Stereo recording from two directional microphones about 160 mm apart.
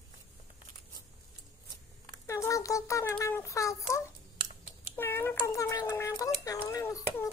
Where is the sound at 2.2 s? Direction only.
20° left (ahead or behind).